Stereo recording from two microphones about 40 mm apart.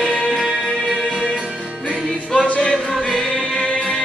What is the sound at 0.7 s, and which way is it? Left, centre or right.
Music, centre.